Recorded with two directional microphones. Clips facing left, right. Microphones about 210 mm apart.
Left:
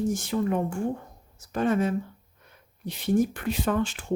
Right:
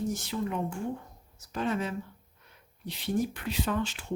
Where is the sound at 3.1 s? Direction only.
50° left (ahead or behind).